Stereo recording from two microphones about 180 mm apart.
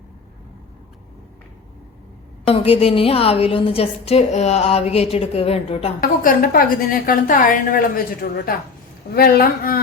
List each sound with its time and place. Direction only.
2.5 s a woman's voice: 35° left (ahead or behind)
6.0 s a woman's voice: 50° left (ahead or behind)